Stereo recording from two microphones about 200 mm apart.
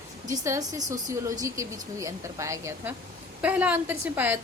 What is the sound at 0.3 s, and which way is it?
A woman's voice, 15° right (ahead or behind).